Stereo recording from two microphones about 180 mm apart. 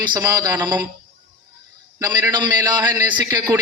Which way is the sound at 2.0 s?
20° right (ahead or behind).